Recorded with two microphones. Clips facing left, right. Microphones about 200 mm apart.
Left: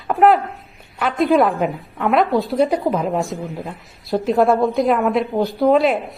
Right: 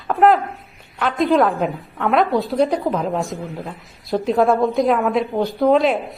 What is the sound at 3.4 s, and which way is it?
Speech, 15° left (ahead or behind).